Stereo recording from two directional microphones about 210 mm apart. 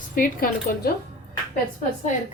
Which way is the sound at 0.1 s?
40° left (ahead or behind).